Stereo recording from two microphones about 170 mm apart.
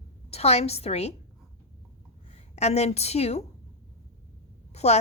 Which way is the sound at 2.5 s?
40° left (ahead or behind).